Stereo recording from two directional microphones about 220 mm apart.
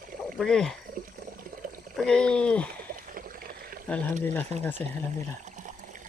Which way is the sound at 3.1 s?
40° right (ahead or behind).